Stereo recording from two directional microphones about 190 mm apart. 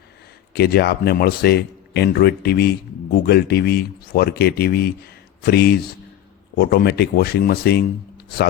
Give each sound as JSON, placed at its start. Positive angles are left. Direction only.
{"t": 0.5, "sound": "speech", "side_deg": 55}